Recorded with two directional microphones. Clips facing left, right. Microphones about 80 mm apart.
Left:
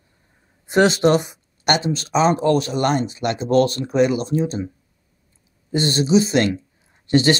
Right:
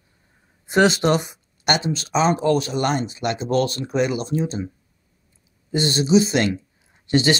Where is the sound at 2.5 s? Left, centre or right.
Centre.